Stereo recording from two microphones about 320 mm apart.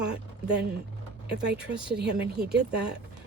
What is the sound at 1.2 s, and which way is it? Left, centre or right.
A woman's voice, right.